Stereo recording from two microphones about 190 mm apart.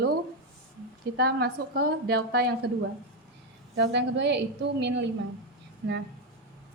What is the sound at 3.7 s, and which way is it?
A woman's voice, 65° right (ahead or behind).